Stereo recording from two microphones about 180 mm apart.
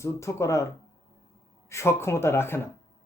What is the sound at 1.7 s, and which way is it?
Speech, 15° left (ahead or behind).